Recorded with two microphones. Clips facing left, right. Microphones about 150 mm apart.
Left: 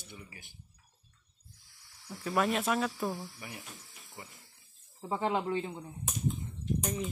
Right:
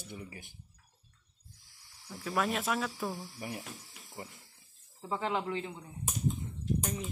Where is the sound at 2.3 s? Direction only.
Centre (ahead or behind).